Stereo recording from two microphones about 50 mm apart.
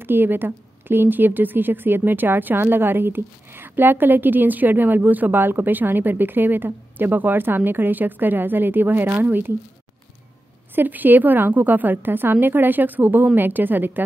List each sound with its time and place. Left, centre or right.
0.0 s a woman's voice: right
10.7 s a woman's voice: right